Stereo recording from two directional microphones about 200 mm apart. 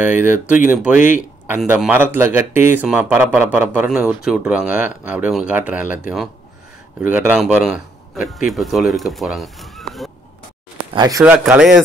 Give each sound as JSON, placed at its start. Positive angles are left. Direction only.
{"t": 0.0, "sound": "a man's voice", "side_deg": -10}
{"t": 11.0, "sound": "a man's voice", "side_deg": -15}
{"t": 11.3, "sound": "speech", "side_deg": 0}